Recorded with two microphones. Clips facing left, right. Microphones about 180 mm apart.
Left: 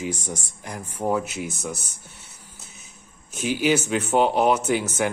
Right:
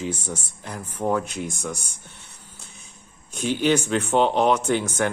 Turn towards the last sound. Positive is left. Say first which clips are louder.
# even
turn(degrees=5)  # may be behind; listen again after turning